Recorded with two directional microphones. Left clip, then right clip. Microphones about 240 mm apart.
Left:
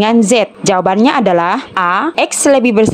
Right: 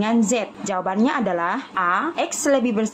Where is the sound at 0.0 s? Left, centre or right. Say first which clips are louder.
Left 11 dB; left.